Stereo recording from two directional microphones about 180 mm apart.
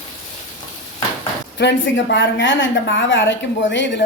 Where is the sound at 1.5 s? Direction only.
70° left (ahead or behind).